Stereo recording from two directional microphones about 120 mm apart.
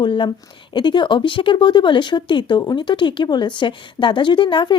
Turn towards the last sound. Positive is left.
turn(degrees=40)  # may be behind; listen again after turning